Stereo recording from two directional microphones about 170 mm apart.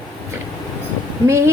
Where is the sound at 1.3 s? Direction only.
15° right (ahead or behind).